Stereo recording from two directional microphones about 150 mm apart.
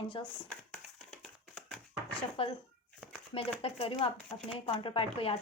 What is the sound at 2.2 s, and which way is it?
Speech, 35° left (ahead or behind).